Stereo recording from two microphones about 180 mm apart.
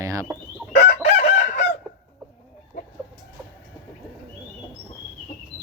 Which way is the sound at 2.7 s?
50° left (ahead or behind).